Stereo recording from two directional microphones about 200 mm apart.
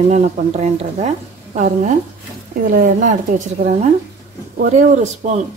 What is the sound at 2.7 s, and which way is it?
A woman's voice, 45° right (ahead or behind).